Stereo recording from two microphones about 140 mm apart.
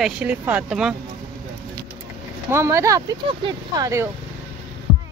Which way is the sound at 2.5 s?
20° right (ahead or behind).